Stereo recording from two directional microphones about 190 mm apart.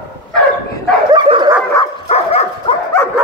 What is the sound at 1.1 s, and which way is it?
Bow-wow, 25° right (ahead or behind).